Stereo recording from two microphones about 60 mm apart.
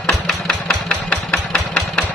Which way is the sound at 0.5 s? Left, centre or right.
Centre.